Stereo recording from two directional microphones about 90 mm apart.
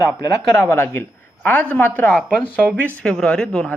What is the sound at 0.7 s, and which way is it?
A man's voice, 20° left (ahead or behind).